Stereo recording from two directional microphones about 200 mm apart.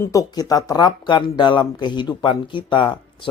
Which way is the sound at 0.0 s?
15° left (ahead or behind).